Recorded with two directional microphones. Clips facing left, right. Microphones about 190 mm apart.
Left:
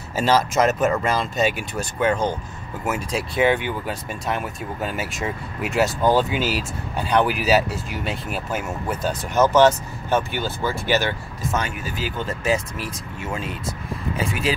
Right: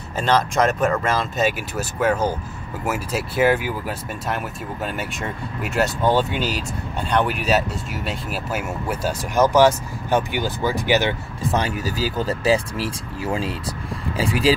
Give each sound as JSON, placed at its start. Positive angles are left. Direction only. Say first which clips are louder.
{"t": 0.1, "sound": "speech", "louder": "left 1 dB", "side_deg": 5}
{"t": 11.5, "sound": "speech", "louder": "right 4 dB", "side_deg": -35}